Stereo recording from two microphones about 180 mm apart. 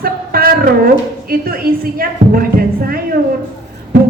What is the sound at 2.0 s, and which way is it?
Speech, 55° right (ahead or behind).